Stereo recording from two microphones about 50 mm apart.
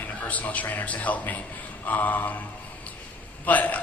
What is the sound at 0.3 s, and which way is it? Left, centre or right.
A man's voice, left.